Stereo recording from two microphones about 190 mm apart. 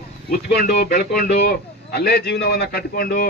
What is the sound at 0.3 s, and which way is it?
A man's voice, 55° left (ahead or behind).